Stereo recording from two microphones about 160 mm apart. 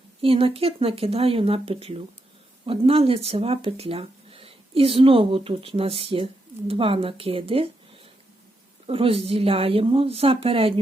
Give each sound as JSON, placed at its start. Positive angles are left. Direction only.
{"t": 0.2, "sound": "speech", "side_deg": -35}
{"t": 8.9, "sound": "speech", "side_deg": -35}